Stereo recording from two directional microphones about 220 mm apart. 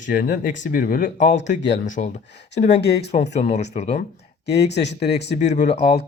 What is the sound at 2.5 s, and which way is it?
Speech, 50° left (ahead or behind).